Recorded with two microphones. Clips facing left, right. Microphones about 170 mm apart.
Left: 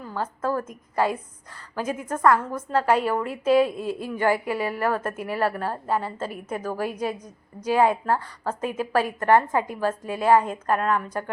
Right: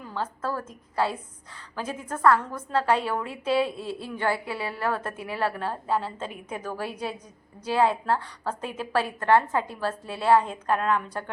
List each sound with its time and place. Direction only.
0.1 s a woman's voice: 10° left (ahead or behind)